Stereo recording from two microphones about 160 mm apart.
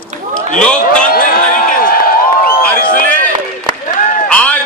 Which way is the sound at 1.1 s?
65° left (ahead or behind).